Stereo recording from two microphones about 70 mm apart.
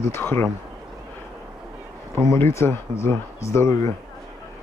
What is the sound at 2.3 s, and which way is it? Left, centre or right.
Speech, left.